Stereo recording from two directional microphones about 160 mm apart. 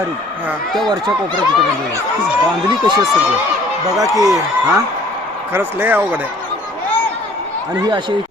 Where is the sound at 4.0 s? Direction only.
20° right (ahead or behind).